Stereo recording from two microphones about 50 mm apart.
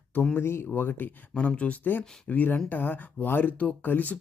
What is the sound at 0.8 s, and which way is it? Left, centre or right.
Speech, left.